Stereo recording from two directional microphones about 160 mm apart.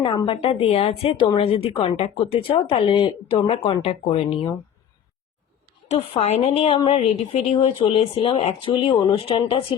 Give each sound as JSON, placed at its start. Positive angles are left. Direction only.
{"t": 0.0, "sound": "speech", "side_deg": 30}
{"t": 5.9, "sound": "speech", "side_deg": 45}